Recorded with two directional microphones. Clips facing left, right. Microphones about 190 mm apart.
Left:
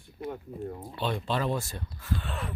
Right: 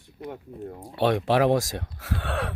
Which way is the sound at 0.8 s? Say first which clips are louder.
Right 11 dB; 80° right.